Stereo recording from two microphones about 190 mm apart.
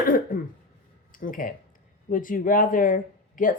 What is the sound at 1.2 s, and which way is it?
Speech, 45° left (ahead or behind).